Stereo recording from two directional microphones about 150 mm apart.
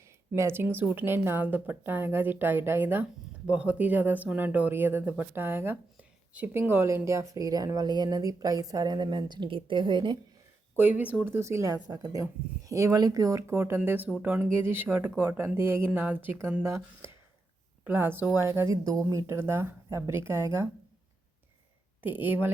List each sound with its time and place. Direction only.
0.0 s a woman's voice: 15° right (ahead or behind)
11.0 s a woman's voice: 10° right (ahead or behind)
22.0 s a woman's voice: 10° right (ahead or behind)